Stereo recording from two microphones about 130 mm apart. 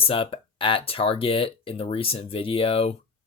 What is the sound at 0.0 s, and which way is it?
Speech, 45° left (ahead or behind).